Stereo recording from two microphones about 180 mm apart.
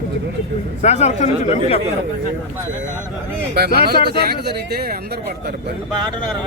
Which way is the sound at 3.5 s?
60° right (ahead or behind).